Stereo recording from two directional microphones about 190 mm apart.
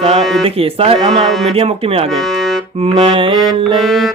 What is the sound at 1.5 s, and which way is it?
Speech, 30° right (ahead or behind).